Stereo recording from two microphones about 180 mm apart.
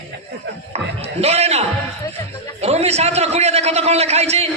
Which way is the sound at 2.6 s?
35° right (ahead or behind).